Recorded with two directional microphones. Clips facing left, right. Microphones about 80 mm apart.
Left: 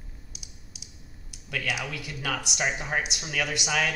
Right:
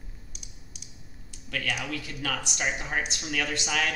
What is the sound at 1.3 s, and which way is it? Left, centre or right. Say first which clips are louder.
Speech: left 1 dB; centre.